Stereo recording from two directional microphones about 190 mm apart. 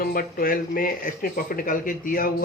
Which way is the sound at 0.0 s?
50° left (ahead or behind).